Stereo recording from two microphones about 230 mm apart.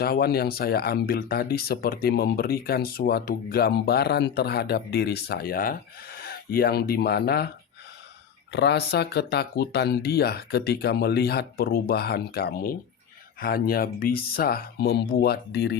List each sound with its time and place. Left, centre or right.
0.0 s speech: left
8.5 s speech: left